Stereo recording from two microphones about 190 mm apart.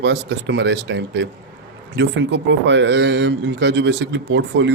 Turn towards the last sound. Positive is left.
turn(degrees=-70)  # may be behind; listen again after turning